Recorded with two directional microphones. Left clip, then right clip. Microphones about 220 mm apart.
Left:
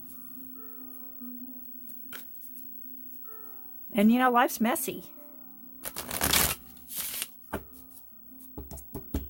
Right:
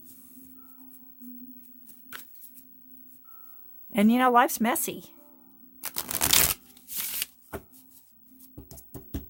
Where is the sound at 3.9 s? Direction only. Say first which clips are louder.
Right 2 dB; 25° right (ahead or behind).